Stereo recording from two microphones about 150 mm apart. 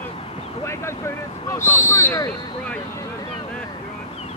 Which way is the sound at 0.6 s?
15° left (ahead or behind).